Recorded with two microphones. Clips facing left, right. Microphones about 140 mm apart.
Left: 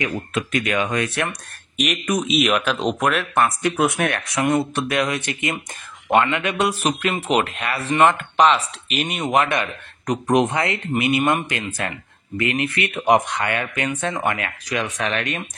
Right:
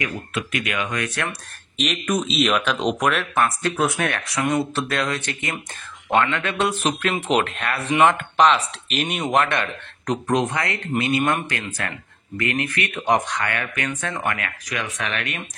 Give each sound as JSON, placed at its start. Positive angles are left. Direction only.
{"t": 0.3, "sound": "speech", "side_deg": 35}
{"t": 0.9, "sound": "speech", "side_deg": 20}
{"t": 1.8, "sound": "speech", "side_deg": 10}